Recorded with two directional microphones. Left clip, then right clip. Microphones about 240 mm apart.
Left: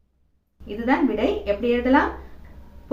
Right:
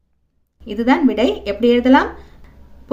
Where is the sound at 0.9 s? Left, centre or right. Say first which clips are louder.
Right 5 dB; right.